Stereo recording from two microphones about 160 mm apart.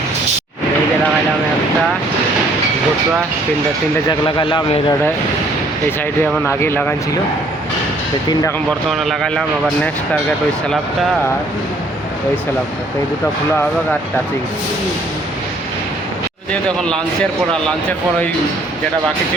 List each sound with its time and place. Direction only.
4.4 s a man's voice: 30° left (ahead or behind)
6.4 s speech: 15° left (ahead or behind)
8.3 s a man's voice: 25° left (ahead or behind)
8.9 s speech: centre (ahead or behind)
16.5 s speech: 5° left (ahead or behind)